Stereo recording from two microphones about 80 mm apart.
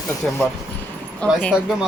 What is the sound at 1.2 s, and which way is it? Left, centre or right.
Speech, centre.